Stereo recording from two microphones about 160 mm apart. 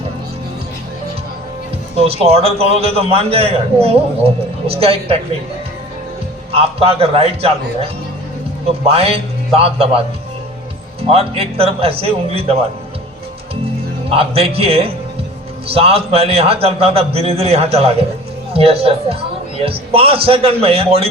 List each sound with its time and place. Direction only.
2.0 s a man's voice: 40° right (ahead or behind)
6.5 s a man's voice: 35° right (ahead or behind)
8.9 s a man's voice: 35° right (ahead or behind)
11.1 s a man's voice: 40° right (ahead or behind)
14.1 s a man's voice: 35° right (ahead or behind)